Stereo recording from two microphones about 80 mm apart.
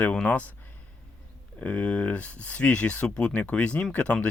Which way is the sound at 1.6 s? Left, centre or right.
Centre.